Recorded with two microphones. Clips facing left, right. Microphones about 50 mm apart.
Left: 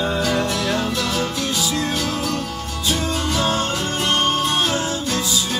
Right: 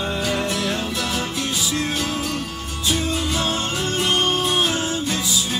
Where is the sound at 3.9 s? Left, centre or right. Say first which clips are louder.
Left 1 dB; left.